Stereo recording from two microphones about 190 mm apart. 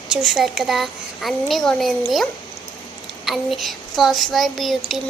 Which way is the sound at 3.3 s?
Centre (ahead or behind).